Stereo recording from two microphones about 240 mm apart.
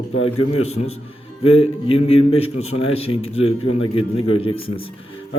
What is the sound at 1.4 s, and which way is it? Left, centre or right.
A man's voice, left.